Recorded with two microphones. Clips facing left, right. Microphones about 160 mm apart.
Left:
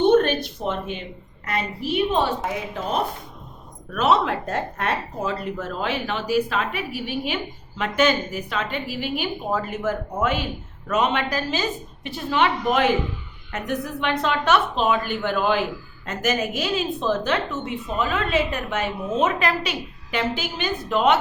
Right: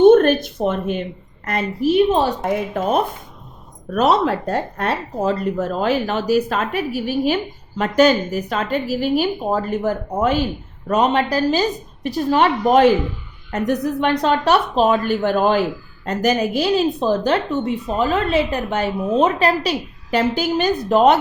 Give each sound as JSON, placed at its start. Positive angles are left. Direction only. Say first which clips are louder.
{"t": 0.0, "sound": "a woman's voice", "louder": "right 7 dB", "side_deg": -50}
{"t": 3.9, "sound": "a woman's voice", "louder": "right 4 dB", "side_deg": -40}